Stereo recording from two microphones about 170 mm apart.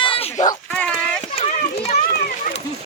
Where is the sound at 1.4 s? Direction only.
45° left (ahead or behind).